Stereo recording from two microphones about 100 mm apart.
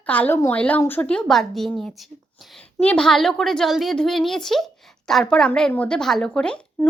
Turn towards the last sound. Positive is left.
turn(degrees=10)  # may be behind; listen again after turning